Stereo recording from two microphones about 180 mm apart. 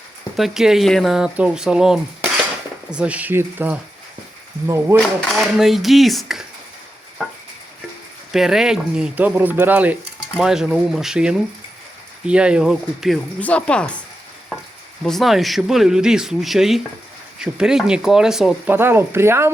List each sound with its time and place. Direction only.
0.3 s speech: centre (ahead or behind)
3.0 s speech: 10° right (ahead or behind)
5.4 s speech: centre (ahead or behind)
8.3 s a woman's voice: centre (ahead or behind)
15.0 s speech: centre (ahead or behind)